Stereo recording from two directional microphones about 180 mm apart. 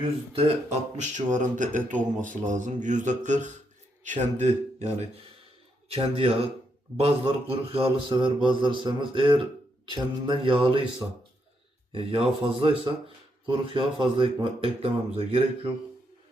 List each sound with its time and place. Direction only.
0.9 s speech: 45° right (ahead or behind)
1.9 s speech: 10° left (ahead or behind)
2.2 s a man's voice: 45° right (ahead or behind); by 10.8 s 30° right (ahead or behind)
11.9 s speech: 30° right (ahead or behind)